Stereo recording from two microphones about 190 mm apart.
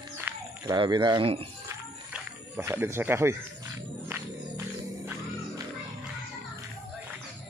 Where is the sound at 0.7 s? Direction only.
25° right (ahead or behind).